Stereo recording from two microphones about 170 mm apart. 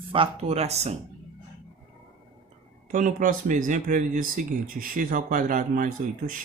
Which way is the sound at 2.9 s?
50° right (ahead or behind).